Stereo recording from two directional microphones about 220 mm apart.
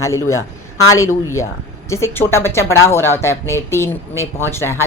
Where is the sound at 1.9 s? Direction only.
10° left (ahead or behind).